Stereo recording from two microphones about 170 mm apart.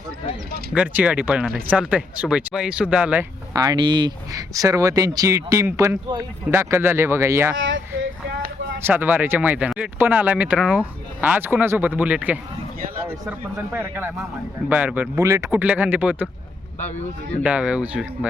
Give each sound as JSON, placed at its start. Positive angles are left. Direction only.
{"t": 0.7, "sound": "speech", "side_deg": -10}
{"t": 3.5, "sound": "speech", "side_deg": -25}
{"t": 8.3, "sound": "a sound", "side_deg": -90}
{"t": 8.8, "sound": "speech", "side_deg": -10}
{"t": 13.7, "sound": "speech", "side_deg": -10}
{"t": 15.4, "sound": "speech", "side_deg": -10}
{"t": 17.4, "sound": "speech", "side_deg": -5}